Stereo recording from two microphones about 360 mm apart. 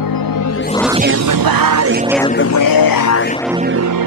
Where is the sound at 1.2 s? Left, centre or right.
Right.